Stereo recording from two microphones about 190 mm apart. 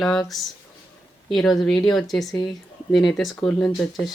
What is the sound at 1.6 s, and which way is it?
Speech, centre (ahead or behind).